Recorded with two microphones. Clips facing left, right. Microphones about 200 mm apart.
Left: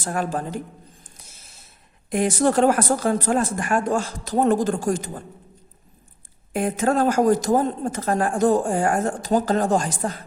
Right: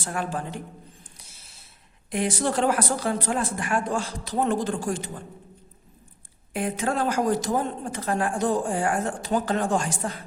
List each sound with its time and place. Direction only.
0.0 s a woman's voice: 40° left (ahead or behind)
2.0 s a woman's voice: 45° left (ahead or behind)
6.5 s a woman's voice: 45° left (ahead or behind)